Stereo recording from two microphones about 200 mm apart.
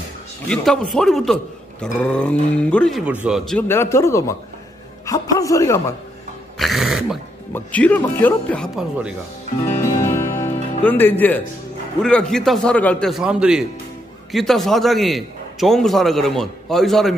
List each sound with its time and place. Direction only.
0.5 s a man's voice: 5° left (ahead or behind)
6.6 s a man's voice: centre (ahead or behind)
8.7 s a man's voice: 5° right (ahead or behind)
10.1 s music: 15° left (ahead or behind)
12.0 s a man's voice: 5° left (ahead or behind)